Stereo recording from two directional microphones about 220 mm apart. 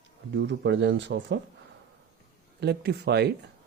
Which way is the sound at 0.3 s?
55° right (ahead or behind).